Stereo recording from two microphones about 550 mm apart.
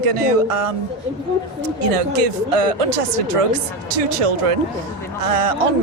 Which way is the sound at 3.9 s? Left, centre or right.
Right.